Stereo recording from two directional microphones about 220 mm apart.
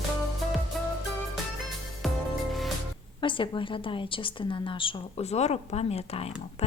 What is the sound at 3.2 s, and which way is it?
A woman's voice, 20° left (ahead or behind).